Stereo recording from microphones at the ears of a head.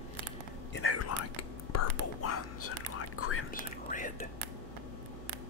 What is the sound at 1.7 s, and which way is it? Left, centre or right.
Whispering, left.